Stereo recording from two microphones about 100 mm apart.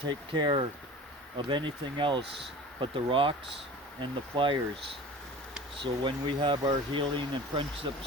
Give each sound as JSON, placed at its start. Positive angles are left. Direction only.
{"t": 0.0, "sound": "speech", "side_deg": -55}
{"t": 5.8, "sound": "speech", "side_deg": -55}